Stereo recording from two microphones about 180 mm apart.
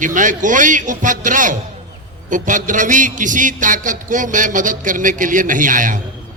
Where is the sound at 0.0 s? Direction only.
45° right (ahead or behind).